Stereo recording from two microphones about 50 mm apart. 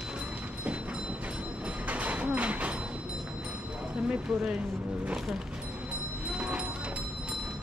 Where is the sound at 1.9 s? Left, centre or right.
Right.